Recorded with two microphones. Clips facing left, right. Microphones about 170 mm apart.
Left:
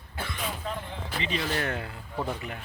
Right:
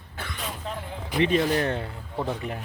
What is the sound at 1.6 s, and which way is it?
Speech, 30° right (ahead or behind).